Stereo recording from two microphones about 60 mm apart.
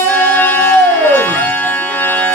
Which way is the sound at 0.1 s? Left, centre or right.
Left.